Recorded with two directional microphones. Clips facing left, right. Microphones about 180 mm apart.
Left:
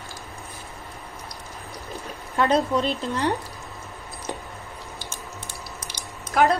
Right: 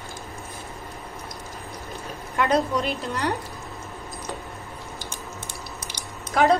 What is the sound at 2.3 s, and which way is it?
Speech, 30° left (ahead or behind).